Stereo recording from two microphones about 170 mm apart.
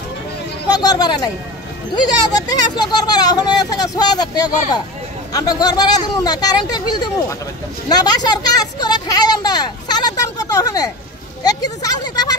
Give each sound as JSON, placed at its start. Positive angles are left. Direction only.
{"t": 0.7, "sound": "speech", "side_deg": 25}
{"t": 2.3, "sound": "speech", "side_deg": 25}